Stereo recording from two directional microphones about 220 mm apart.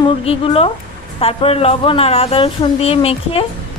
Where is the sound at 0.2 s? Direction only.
25° left (ahead or behind).